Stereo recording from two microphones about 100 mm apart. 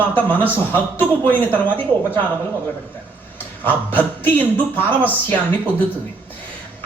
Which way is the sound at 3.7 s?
20° left (ahead or behind).